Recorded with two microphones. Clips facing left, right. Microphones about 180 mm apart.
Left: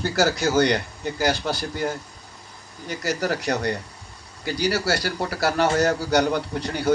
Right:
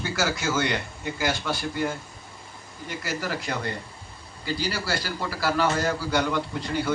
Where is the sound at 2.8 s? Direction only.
40° left (ahead or behind).